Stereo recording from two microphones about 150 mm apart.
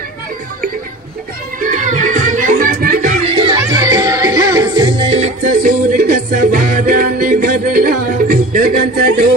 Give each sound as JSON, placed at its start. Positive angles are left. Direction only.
{"t": 1.6, "sound": "music", "side_deg": -60}
{"t": 3.3, "sound": "music", "side_deg": -35}
{"t": 3.5, "sound": "music", "side_deg": -25}
{"t": 5.1, "sound": "music", "side_deg": -50}